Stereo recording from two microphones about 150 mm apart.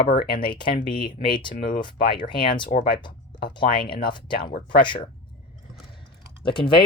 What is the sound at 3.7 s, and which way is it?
Speech, 30° left (ahead or behind).